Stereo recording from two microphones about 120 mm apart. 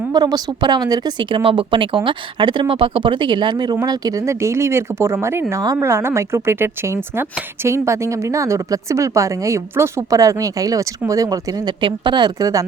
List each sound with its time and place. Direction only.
0.1 s speech: 35° right (ahead or behind)
11.8 s speech: 40° right (ahead or behind)